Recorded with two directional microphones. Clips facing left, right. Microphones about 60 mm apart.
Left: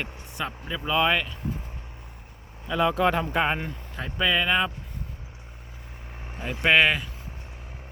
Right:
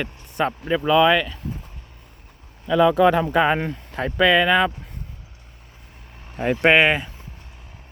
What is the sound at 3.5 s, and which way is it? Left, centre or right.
Speech, right.